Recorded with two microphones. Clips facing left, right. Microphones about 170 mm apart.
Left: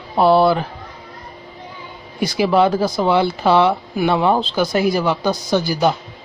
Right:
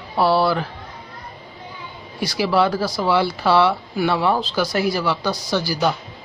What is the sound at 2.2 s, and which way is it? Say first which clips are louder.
Speech: left 4 dB; 20° left (ahead or behind).